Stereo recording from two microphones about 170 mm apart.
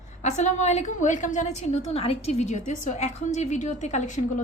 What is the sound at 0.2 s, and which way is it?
A woman's voice, 45° left (ahead or behind).